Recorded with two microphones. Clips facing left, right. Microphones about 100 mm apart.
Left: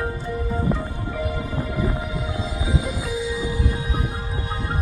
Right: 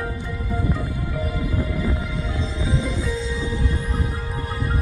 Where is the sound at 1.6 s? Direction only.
30° left (ahead or behind).